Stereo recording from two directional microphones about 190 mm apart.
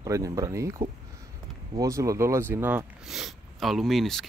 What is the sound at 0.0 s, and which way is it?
Speech, 20° right (ahead or behind).